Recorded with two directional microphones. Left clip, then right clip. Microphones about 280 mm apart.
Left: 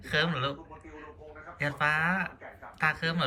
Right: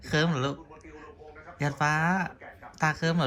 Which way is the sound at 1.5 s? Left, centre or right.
Centre.